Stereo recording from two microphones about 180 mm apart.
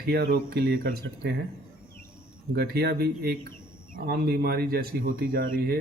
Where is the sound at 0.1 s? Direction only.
55° right (ahead or behind).